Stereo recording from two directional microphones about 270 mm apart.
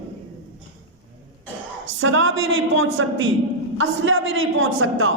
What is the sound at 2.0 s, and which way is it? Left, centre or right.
A woman's voice, right.